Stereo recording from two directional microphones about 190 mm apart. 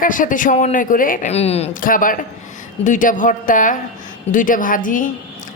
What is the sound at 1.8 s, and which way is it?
A woman's voice, 45° left (ahead or behind).